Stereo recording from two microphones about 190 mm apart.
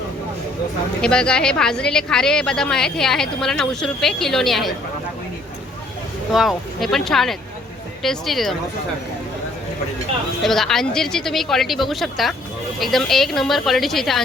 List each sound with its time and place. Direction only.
1.0 s a woman's voice: 5° left (ahead or behind)
6.3 s a woman's voice: centre (ahead or behind)
10.4 s a woman's voice: centre (ahead or behind)